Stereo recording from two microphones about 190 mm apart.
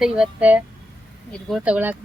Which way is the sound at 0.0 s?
5° right (ahead or behind).